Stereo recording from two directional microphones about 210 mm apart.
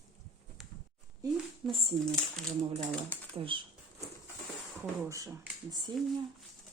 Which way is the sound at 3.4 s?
25° right (ahead or behind).